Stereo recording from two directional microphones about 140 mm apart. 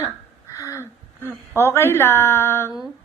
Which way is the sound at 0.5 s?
25° left (ahead or behind).